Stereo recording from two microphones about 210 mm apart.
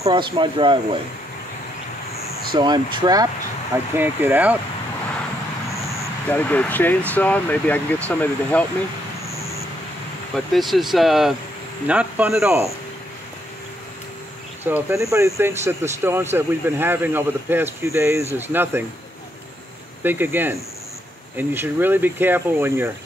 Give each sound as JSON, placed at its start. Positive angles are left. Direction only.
{"t": 0.0, "sound": "speech", "side_deg": -20}
{"t": 2.5, "sound": "speech", "side_deg": -20}
{"t": 5.9, "sound": "speech", "side_deg": 10}
{"t": 10.3, "sound": "speech", "side_deg": 0}
{"t": 14.6, "sound": "speech", "side_deg": -10}
{"t": 20.0, "sound": "speech", "side_deg": -10}